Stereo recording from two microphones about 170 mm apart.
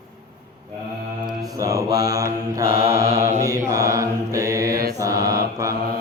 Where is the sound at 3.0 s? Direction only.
40° right (ahead or behind).